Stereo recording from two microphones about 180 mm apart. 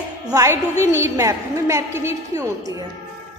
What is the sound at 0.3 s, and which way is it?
A woman's voice, 15° right (ahead or behind).